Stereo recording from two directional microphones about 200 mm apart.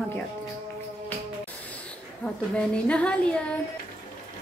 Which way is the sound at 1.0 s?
10° left (ahead or behind).